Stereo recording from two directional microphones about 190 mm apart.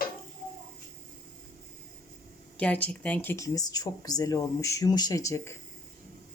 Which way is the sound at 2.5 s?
5° left (ahead or behind).